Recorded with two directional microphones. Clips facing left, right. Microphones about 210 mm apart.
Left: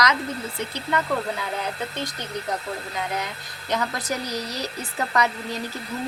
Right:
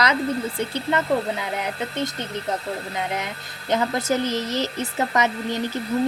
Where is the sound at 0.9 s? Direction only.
20° right (ahead or behind).